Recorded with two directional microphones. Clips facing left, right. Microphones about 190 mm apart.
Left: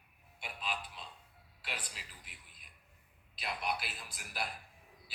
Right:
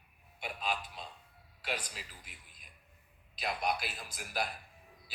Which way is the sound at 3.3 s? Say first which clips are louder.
Right 4 dB; 40° right (ahead or behind).